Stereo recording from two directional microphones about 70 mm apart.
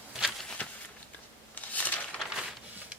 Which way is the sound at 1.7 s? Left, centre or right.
Left.